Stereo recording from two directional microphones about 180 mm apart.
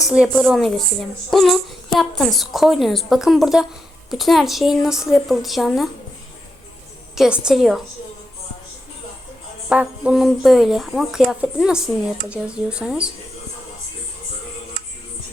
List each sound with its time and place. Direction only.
0.1 s a woman's voice: 10° right (ahead or behind)
7.2 s speech: 5° right (ahead or behind)
9.6 s speech: 5° right (ahead or behind)